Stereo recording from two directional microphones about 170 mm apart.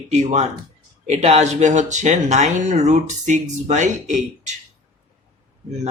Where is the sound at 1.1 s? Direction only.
40° right (ahead or behind).